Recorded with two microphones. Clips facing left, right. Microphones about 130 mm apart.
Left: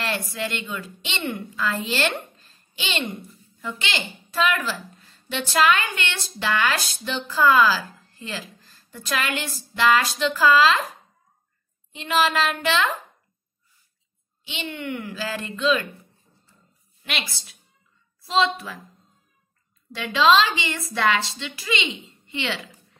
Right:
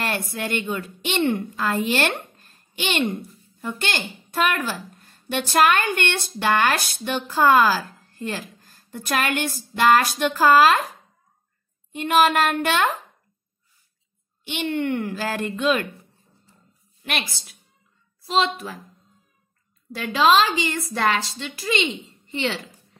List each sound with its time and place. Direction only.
0.1 s a woman's voice: 55° right (ahead or behind)
2.3 s a sound: 55° right (ahead or behind)
3.6 s a woman's voice: 50° right (ahead or behind)
11.9 s a woman's voice: 55° right (ahead or behind)
14.4 s a woman's voice: 60° right (ahead or behind)
17.0 s a woman's voice: 50° right (ahead or behind)
18.4 s a woman's voice: 45° right (ahead or behind)
20.0 s a woman's voice: 45° right (ahead or behind)